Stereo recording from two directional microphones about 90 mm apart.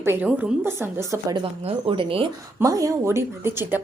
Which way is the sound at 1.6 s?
80° right.